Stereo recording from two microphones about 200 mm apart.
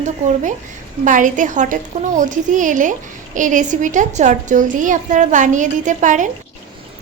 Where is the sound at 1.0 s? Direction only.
40° right (ahead or behind).